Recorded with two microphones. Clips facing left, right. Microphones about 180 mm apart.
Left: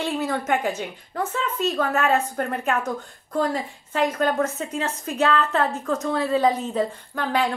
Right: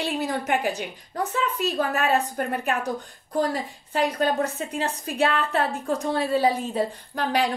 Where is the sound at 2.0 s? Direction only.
35° right (ahead or behind).